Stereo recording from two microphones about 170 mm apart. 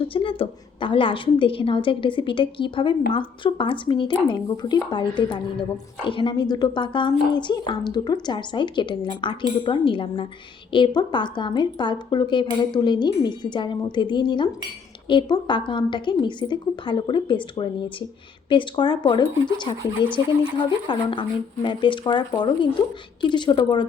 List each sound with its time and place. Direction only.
0.1 s a woman's voice: 30° left (ahead or behind)